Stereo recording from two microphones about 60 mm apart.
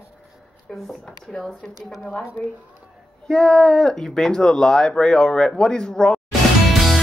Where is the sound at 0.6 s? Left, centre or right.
Centre.